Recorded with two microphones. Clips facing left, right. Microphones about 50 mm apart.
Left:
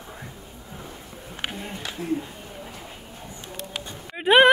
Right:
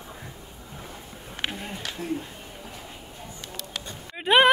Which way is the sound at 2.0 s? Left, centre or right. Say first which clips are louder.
Left 4 dB; left.